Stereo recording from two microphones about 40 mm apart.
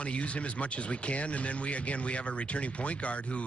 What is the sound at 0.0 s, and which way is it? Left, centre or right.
Speech, left.